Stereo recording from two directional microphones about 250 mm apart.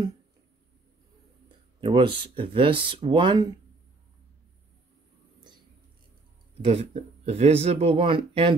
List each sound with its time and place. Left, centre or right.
1.8 s speech: centre
6.6 s speech: right